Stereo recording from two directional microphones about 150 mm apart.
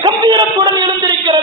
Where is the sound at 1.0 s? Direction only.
30° right (ahead or behind).